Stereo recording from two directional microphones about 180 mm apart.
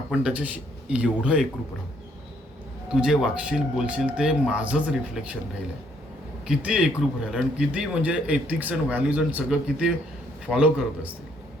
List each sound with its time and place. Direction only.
0.1 s speech: 5° right (ahead or behind)
2.9 s speech: 5° right (ahead or behind)
6.4 s speech: 5° right (ahead or behind)